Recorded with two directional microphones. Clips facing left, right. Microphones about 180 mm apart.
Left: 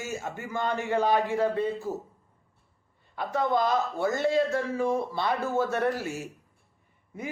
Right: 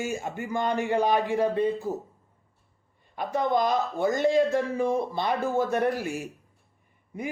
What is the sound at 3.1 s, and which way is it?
A man's voice, 15° right (ahead or behind).